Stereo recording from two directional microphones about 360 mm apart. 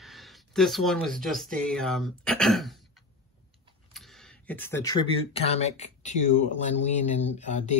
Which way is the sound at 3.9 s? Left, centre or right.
Centre.